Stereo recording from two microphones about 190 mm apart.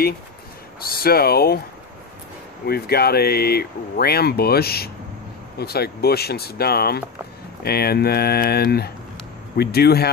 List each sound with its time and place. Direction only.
0.8 s speech: 50° left (ahead or behind)
2.6 s speech: 55° left (ahead or behind)